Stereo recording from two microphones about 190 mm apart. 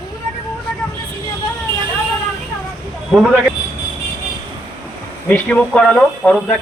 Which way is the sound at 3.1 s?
5° right (ahead or behind).